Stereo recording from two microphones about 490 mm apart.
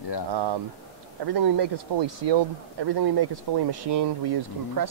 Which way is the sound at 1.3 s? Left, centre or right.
Right.